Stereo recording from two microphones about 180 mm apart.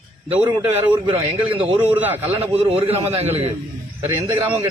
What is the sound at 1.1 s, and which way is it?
Speech, 30° right (ahead or behind).